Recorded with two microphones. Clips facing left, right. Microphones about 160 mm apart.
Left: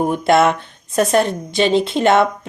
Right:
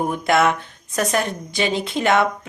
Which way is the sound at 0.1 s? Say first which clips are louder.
Left 4 dB; 30° left (ahead or behind).